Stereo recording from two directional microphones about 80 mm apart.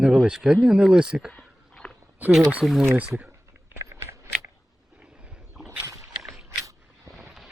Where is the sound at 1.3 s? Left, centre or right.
Centre.